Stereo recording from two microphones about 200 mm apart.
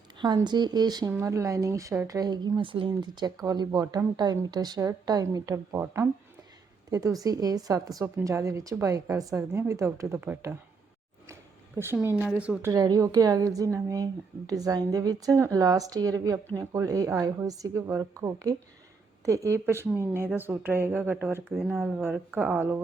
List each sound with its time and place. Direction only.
0.2 s a woman's voice: 20° right (ahead or behind)
12.0 s a woman's voice: 10° right (ahead or behind)
12.7 s a woman's voice: 20° right (ahead or behind)